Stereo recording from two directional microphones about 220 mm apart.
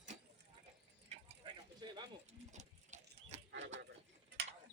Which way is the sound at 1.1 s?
30° right (ahead or behind).